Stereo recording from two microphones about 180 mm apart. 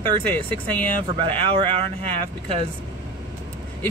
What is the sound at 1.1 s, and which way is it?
Speech, 30° right (ahead or behind).